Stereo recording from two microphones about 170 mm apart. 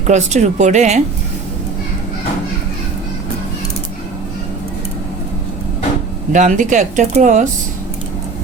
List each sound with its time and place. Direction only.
0.1 s speech: 45° right (ahead or behind)
6.3 s speech: 45° right (ahead or behind)